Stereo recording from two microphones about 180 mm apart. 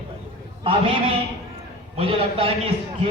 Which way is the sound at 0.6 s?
30° right (ahead or behind).